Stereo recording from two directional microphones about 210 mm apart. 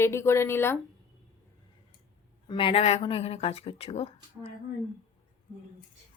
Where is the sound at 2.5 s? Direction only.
25° left (ahead or behind).